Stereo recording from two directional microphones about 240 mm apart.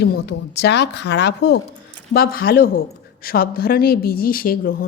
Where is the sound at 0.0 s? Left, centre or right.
Left.